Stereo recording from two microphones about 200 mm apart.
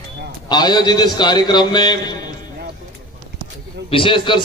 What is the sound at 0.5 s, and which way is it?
A man's voice, 20° left (ahead or behind).